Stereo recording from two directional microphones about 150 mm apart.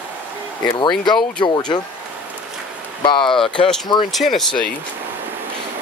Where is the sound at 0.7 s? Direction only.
30° left (ahead or behind).